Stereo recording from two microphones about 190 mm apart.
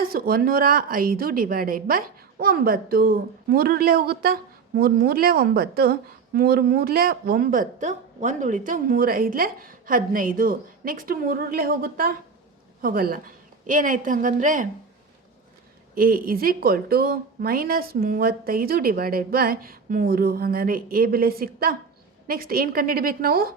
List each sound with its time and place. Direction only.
0.0 s a woman's voice: 50° right (ahead or behind)
16.0 s a woman's voice: 50° right (ahead or behind)